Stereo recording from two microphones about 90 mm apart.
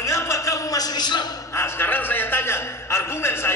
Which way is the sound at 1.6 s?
25° left (ahead or behind).